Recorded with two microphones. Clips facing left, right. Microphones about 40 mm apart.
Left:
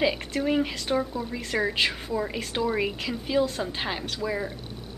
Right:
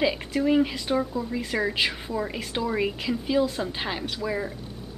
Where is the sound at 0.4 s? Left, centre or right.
Centre.